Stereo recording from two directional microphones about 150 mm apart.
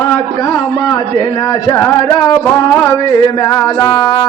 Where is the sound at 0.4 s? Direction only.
25° left (ahead or behind).